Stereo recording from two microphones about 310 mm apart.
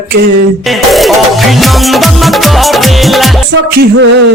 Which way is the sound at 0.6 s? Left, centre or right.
Centre.